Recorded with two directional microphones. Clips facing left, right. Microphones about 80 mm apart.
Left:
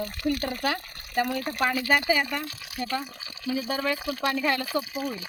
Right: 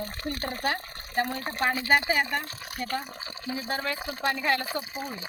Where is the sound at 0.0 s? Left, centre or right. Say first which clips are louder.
Left 5 dB; right.